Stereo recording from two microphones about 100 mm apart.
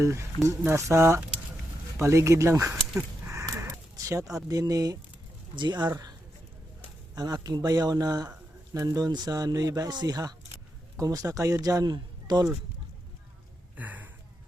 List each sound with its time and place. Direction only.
0.0 s speech: 30° right (ahead or behind)
3.2 s a sound: 30° right (ahead or behind)
4.4 s speech: 35° right (ahead or behind)
5.5 s speech: 50° right (ahead or behind)
7.2 s speech: 40° right (ahead or behind)
13.7 s a sound: 15° right (ahead or behind)